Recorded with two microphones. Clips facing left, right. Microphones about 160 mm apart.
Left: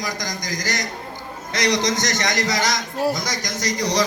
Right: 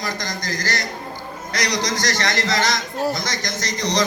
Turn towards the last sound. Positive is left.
turn(degrees=10)  # may be behind; listen again after turning